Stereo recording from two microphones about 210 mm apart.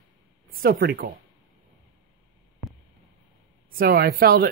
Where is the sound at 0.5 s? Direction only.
45° right (ahead or behind).